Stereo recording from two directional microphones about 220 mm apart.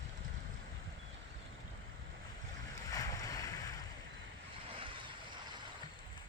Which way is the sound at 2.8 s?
15° left (ahead or behind).